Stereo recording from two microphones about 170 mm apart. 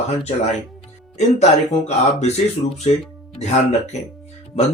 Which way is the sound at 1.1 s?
40° left (ahead or behind).